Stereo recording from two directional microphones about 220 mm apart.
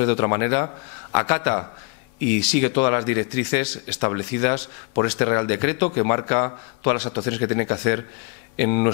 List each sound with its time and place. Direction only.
0.0 s speech: 15° left (ahead or behind)
2.8 s a man's voice: 15° left (ahead or behind)
7.2 s speech: 15° left (ahead or behind)